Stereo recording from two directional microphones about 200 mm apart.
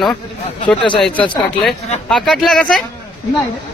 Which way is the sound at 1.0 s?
Centre (ahead or behind).